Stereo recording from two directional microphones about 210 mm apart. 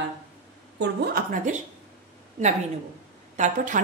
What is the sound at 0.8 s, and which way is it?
Speech, 45° right (ahead or behind).